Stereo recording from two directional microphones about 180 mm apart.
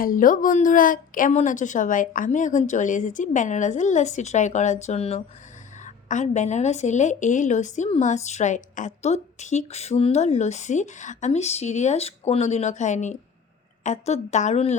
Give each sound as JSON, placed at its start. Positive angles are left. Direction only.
{"t": 0.0, "sound": "a woman's voice", "side_deg": 50}